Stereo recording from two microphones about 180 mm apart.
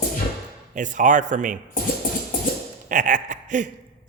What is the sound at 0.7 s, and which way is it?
Speech, 45° right (ahead or behind).